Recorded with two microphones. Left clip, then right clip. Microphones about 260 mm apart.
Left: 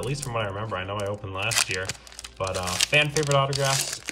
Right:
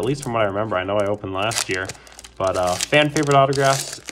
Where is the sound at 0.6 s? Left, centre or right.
Right.